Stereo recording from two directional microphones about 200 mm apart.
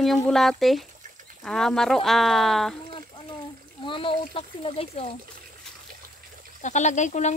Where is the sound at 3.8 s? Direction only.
25° left (ahead or behind).